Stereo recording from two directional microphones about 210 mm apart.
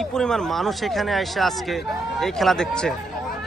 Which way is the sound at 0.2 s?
Centre (ahead or behind).